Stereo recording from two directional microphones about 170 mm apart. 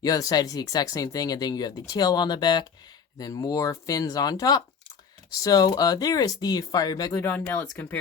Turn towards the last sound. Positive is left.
turn(degrees=15)  # may be behind; listen again after turning